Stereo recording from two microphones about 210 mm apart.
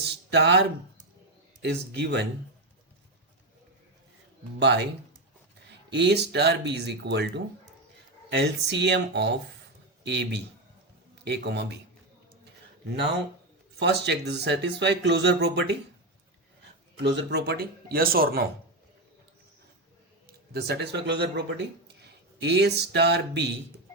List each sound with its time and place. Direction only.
0.0 s a sound: 55° right (ahead or behind)
1.6 s speech: 55° right (ahead or behind)
4.6 s speech: 55° right (ahead or behind)
5.9 s a man's voice: 55° right (ahead or behind)
13.7 s speech: 55° right (ahead or behind)
17.0 s speech: 55° right (ahead or behind)
20.2 s a man's voice: 50° right (ahead or behind)